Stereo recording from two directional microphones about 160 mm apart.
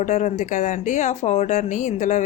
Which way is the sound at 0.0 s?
50° left (ahead or behind).